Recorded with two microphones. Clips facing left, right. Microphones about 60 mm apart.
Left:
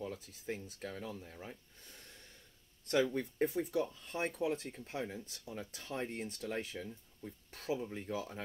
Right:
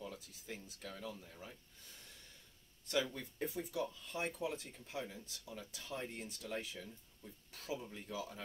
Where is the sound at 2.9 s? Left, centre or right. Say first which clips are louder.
Left 6 dB; left.